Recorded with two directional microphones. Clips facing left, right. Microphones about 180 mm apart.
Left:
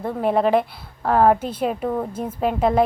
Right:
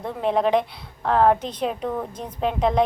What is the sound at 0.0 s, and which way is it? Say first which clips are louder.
A woman's voice: left 2 dB; 5° left (ahead or behind).